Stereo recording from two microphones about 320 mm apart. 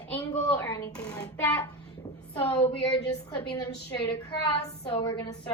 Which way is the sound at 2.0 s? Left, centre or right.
Centre.